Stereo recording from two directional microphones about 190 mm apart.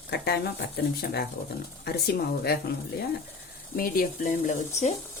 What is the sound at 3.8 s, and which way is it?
Speech, 45° left (ahead or behind).